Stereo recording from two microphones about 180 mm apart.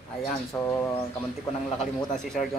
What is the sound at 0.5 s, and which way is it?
Speech, 10° left (ahead or behind).